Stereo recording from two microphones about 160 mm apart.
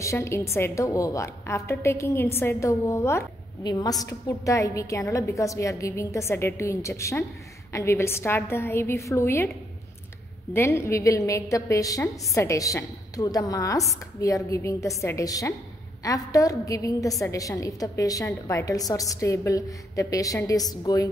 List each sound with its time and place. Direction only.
0.0 s a woman's voice: 20° left (ahead or behind)
10.5 s a woman's voice: 15° left (ahead or behind)